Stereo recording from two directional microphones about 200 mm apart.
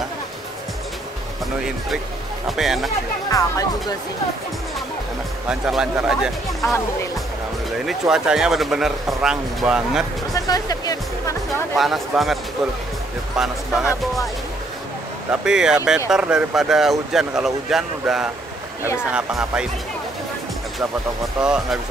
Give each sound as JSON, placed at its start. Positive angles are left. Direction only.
{"t": 2.4, "sound": "speech", "side_deg": 0}
{"t": 3.3, "sound": "speech", "side_deg": 15}
{"t": 5.5, "sound": "speech", "side_deg": -5}
{"t": 7.8, "sound": "speech", "side_deg": 0}
{"t": 10.3, "sound": "speech", "side_deg": 20}
{"t": 11.7, "sound": "speech", "side_deg": 0}
{"t": 13.4, "sound": "speech", "side_deg": -5}
{"t": 15.4, "sound": "speech", "side_deg": -5}
{"t": 21.4, "sound": "speech", "side_deg": -5}